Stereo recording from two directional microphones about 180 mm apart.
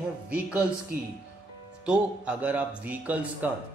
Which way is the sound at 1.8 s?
10° right (ahead or behind).